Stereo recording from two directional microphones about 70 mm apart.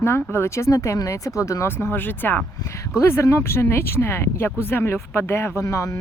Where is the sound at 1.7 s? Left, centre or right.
Left.